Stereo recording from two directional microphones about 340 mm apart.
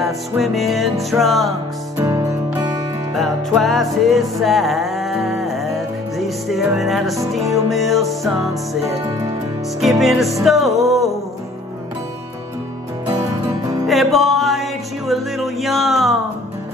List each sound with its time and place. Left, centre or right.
0.0 s music: centre
9.8 s music: centre
13.1 s music: centre
13.8 s music: centre